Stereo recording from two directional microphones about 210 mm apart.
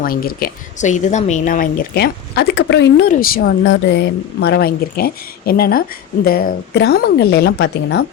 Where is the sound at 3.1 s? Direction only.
45° left (ahead or behind).